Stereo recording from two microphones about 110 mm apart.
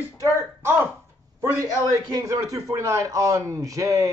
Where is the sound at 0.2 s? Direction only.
25° right (ahead or behind).